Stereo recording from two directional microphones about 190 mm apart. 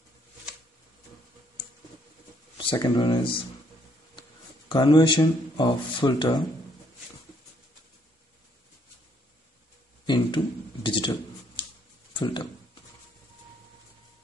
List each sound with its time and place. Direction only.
2.5 s speech: 20° left (ahead or behind)
4.6 s speech: 25° left (ahead or behind)
10.0 s a sound: 25° left (ahead or behind)
12.1 s speech: 25° left (ahead or behind)